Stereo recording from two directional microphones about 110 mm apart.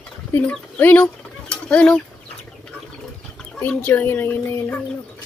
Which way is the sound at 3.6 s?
15° left (ahead or behind).